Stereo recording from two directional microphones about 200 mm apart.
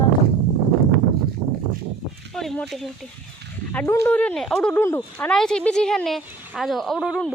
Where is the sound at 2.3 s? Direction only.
Centre (ahead or behind).